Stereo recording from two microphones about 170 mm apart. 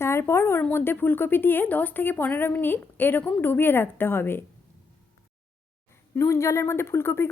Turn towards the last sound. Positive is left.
turn(degrees=15)  # may be behind; listen again after turning